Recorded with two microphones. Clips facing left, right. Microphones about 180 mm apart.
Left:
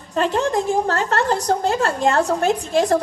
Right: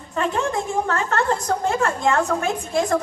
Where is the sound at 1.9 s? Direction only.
35° left (ahead or behind).